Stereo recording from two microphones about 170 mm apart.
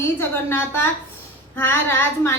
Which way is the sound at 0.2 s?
15° left (ahead or behind).